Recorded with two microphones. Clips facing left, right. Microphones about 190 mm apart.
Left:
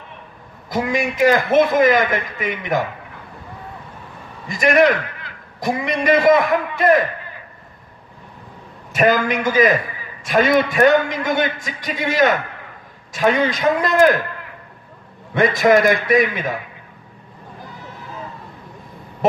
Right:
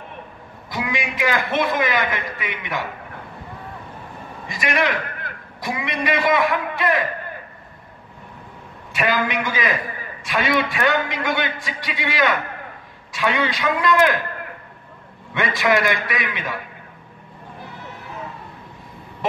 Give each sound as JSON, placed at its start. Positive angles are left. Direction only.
{"t": 0.7, "sound": "a man's voice", "side_deg": 45}
{"t": 4.5, "sound": "a man's voice", "side_deg": 45}
{"t": 8.9, "sound": "a man's voice", "side_deg": 45}
{"t": 15.4, "sound": "a man's voice", "side_deg": 45}